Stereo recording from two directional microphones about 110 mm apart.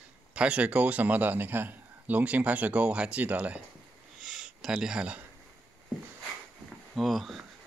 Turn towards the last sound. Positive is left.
turn(degrees=0)  # may be behind; listen again after turning